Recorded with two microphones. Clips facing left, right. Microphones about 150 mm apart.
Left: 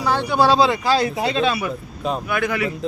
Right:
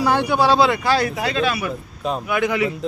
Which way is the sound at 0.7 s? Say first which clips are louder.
Even; 20° left (ahead or behind).